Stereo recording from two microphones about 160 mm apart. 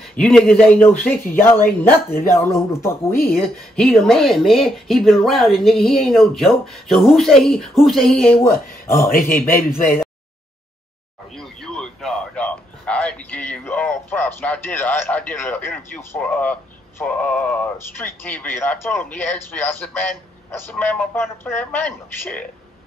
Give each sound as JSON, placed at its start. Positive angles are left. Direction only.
{"t": 0.1, "sound": "a man's voice", "side_deg": 5}
{"t": 3.7, "sound": "speech", "side_deg": 5}
{"t": 8.9, "sound": "a man's voice", "side_deg": 60}
{"t": 11.3, "sound": "a sound", "side_deg": 5}
{"t": 17.0, "sound": "a man's voice", "side_deg": 10}